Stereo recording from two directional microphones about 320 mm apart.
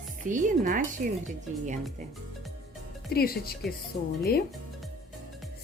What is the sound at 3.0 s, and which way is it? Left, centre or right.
Speech, left.